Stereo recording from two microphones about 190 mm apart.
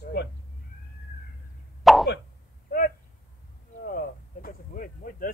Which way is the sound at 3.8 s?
50° left (ahead or behind).